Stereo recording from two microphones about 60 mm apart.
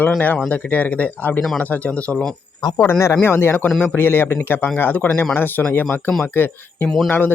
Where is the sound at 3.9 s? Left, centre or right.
Left.